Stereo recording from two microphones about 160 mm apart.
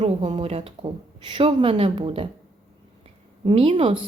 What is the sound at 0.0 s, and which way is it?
Speech, 40° right (ahead or behind).